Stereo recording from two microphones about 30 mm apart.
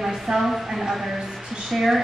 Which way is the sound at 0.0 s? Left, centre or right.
Centre.